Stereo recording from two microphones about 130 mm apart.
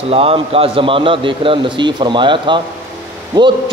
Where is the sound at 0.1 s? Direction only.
50° right (ahead or behind).